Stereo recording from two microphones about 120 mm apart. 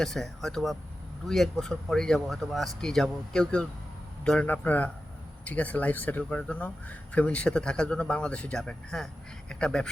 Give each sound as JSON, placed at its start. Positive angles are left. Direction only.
{"t": 0.0, "sound": "speech", "side_deg": 5}